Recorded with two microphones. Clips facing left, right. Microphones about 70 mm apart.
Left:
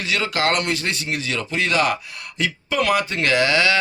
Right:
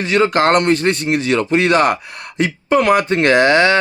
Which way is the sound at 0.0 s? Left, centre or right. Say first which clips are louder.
Right 8 dB; right.